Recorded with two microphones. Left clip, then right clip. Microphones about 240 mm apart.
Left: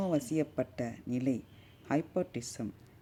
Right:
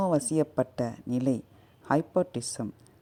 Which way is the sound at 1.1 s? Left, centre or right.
Centre.